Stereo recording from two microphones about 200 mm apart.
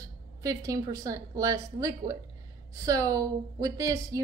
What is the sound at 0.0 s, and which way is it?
A woman's voice, 15° right (ahead or behind).